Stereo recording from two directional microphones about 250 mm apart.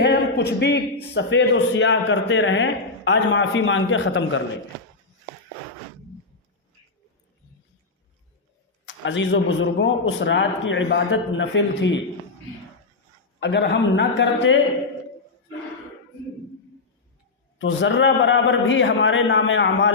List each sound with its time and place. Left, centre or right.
0.0 s a sound: left
1.1 s a man's voice: left
8.9 s a man's voice: left
13.4 s a man's voice: left
17.6 s a man's voice: left